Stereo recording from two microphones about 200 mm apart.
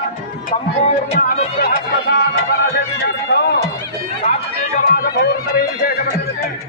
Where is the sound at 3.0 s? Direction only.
55° left (ahead or behind).